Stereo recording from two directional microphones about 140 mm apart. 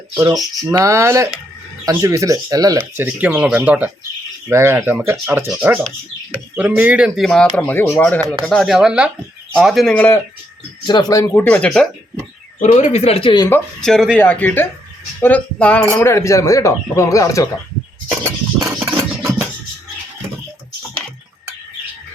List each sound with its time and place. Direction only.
0.7 s speech: 20° right (ahead or behind)
2.7 s speech: 15° right (ahead or behind); by 10.2 s 10° left (ahead or behind)
10.8 s speech: 30° left (ahead or behind); by 11.9 s 5° left (ahead or behind)
12.5 s speech: 50° left (ahead or behind)
13.8 s speech: centre (ahead or behind)
14.2 s speech: 10° left (ahead or behind)
18.2 s a sound: 25° right (ahead or behind)
18.8 s music: 10° right (ahead or behind)